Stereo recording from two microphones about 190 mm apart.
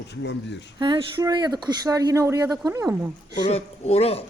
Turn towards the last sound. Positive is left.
turn(degrees=30)  # may be behind; listen again after turning